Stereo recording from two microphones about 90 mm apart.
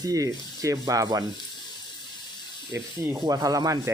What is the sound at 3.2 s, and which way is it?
Speech, 45° right (ahead or behind).